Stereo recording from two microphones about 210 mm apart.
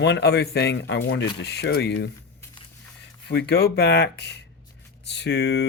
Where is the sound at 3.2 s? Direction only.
50° left (ahead or behind).